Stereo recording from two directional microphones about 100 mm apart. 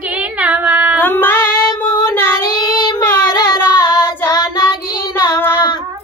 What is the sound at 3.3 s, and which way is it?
Singing, 45° left (ahead or behind).